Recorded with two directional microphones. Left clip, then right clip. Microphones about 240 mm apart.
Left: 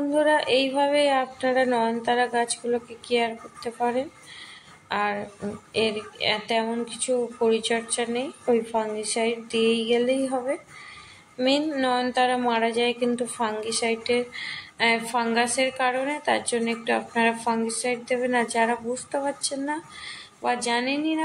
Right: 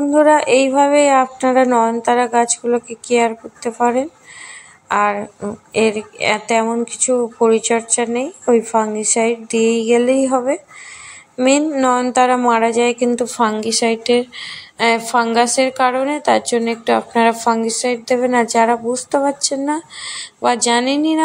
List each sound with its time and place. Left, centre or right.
0.1 s a woman's voice: right